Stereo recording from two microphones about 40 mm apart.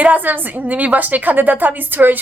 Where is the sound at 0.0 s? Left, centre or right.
Right.